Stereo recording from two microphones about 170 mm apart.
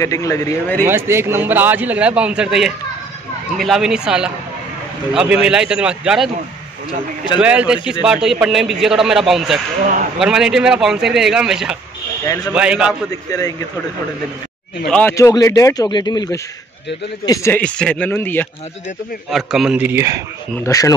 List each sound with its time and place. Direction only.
0.0 s speech: 20° left (ahead or behind)
0.8 s a man's voice: 15° right (ahead or behind)
7.3 s a man's voice: 5° right (ahead or behind)
10.2 s a man's voice: 5° right (ahead or behind)
13.3 s speech: 20° left (ahead or behind)
14.9 s speech: 10° left (ahead or behind)
15.1 s speech: 20° left (ahead or behind)
17.6 s speech: 5° left (ahead or behind)
19.3 s a man's voice: centre (ahead or behind)
20.5 s speech: 20° left (ahead or behind)